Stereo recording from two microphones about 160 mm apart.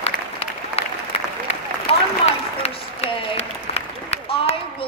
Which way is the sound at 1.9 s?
40° left (ahead or behind).